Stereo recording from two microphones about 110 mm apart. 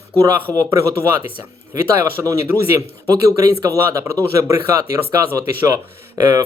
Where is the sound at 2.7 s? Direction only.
30° right (ahead or behind).